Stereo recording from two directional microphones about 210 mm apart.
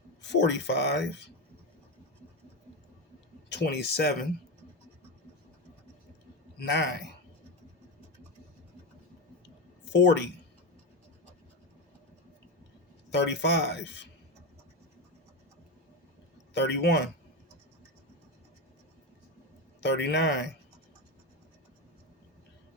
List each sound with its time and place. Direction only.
0.2 s speech: 55° left (ahead or behind)
3.5 s speech: 50° left (ahead or behind)
6.6 s speech: 55° left (ahead or behind)
9.9 s speech: 55° left (ahead or behind)
13.1 s speech: 55° left (ahead or behind)
16.6 s speech: 55° left (ahead or behind)
19.8 s speech: 55° left (ahead or behind)